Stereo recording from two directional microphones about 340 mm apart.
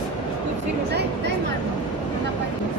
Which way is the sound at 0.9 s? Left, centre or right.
Right.